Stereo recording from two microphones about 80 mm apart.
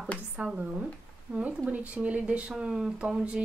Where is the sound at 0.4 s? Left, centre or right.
Centre.